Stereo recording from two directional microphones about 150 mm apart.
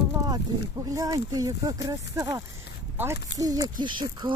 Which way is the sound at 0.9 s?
25° right (ahead or behind).